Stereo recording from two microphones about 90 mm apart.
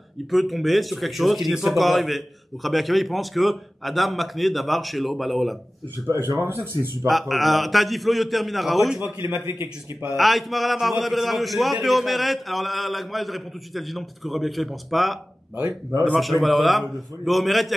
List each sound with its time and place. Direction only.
0.3 s a man's voice: centre (ahead or behind)
6.0 s speech: 35° right (ahead or behind)
7.1 s a man's voice: centre (ahead or behind)
9.3 s a man's voice: 20° right (ahead or behind)
10.1 s a man's voice: centre (ahead or behind)
16.2 s a man's voice: centre (ahead or behind)